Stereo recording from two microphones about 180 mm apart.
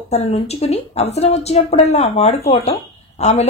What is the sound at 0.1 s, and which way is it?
Speech, 35° left (ahead or behind).